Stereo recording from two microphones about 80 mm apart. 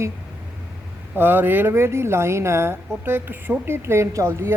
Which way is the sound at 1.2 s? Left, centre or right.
Right.